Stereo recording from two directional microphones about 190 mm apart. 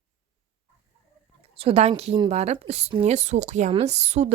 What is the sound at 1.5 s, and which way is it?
Speech, 30° right (ahead or behind).